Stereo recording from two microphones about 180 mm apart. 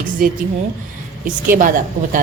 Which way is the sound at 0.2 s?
55° right (ahead or behind).